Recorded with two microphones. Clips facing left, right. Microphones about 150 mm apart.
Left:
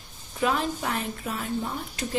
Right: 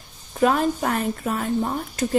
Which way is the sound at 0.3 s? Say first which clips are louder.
Right 6 dB; 50° right (ahead or behind).